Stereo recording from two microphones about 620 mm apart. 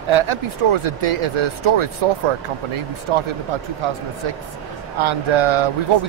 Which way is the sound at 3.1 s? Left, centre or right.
Right.